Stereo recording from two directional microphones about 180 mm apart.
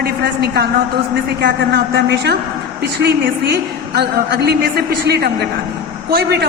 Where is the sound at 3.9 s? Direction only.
65° right (ahead or behind).